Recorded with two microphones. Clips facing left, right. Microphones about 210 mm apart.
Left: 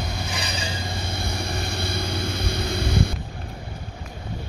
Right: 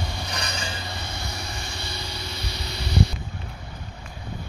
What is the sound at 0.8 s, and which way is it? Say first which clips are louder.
Vehicle: left 4 dB; 50° left (ahead or behind).